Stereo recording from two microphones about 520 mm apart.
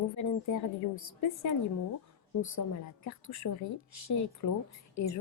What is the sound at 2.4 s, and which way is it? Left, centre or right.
A woman's voice, left.